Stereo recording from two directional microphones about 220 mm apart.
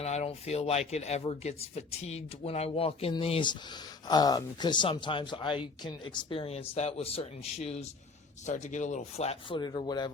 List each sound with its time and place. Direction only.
0.0 s speech: 30° left (ahead or behind)